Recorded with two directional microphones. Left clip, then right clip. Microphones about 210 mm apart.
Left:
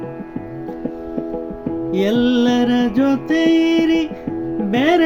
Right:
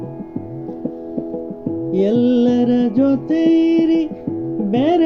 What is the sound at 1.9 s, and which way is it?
Music, 20° left (ahead or behind).